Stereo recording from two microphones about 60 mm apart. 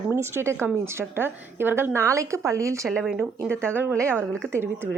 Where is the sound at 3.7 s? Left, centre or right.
Right.